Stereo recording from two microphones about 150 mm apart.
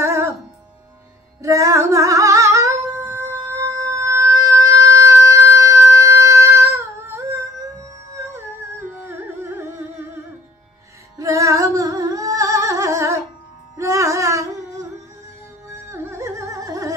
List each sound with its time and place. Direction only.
0.0 s music: 20° right (ahead or behind)
1.4 s female singing: 20° right (ahead or behind)
8.2 s music: 20° right (ahead or behind)
11.1 s singing: 20° right (ahead or behind)
13.7 s music: 20° right (ahead or behind)